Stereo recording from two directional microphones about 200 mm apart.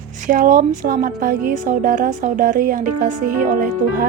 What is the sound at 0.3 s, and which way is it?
A woman's voice, 40° right (ahead or behind).